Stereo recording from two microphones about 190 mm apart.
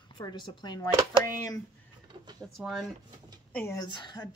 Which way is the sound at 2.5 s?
Centre (ahead or behind).